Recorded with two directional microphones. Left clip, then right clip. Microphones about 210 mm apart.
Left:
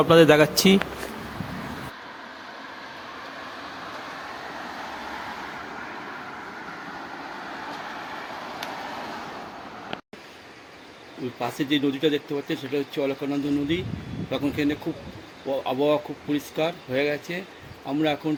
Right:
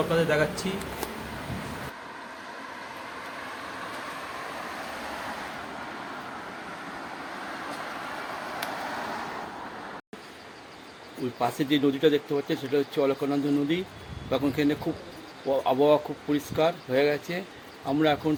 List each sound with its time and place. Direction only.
0.1 s speech: 55° left (ahead or behind)
11.3 s speech: 5° right (ahead or behind)